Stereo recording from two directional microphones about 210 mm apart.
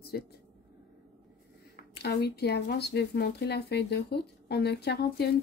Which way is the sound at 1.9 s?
50° left (ahead or behind).